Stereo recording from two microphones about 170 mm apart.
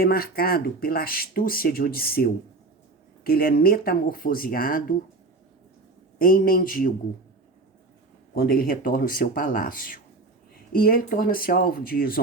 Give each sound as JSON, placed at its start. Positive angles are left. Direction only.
{"t": 0.0, "sound": "speech", "side_deg": 60}
{"t": 6.1, "sound": "speech", "side_deg": 55}
{"t": 8.4, "sound": "speech", "side_deg": 60}